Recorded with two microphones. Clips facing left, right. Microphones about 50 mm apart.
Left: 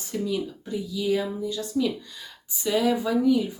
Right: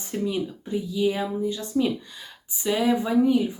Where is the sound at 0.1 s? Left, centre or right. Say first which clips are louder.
Right 1 dB; right.